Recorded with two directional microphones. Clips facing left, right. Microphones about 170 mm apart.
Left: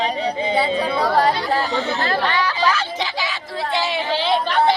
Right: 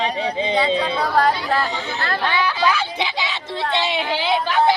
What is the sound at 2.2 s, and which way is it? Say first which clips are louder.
A woman's voice: right 4 dB; 10° right (ahead or behind).